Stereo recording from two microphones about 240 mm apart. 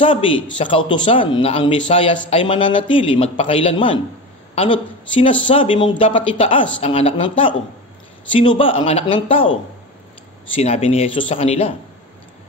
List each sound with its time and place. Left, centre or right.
0.0 s speech: left
8.3 s speech: left
10.5 s speech: left